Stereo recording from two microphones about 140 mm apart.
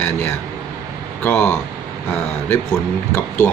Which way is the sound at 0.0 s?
15° left (ahead or behind).